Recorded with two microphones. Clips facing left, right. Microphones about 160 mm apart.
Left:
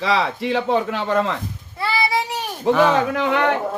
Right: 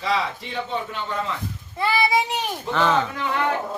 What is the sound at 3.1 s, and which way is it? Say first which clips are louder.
Speech: left 6 dB; 90° left.